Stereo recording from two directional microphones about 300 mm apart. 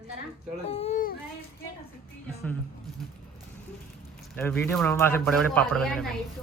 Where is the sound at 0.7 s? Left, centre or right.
Left.